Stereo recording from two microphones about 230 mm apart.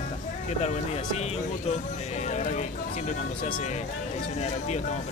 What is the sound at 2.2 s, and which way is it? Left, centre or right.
Speech, left.